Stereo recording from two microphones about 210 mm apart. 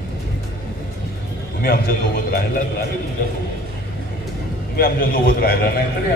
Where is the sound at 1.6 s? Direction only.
45° left (ahead or behind).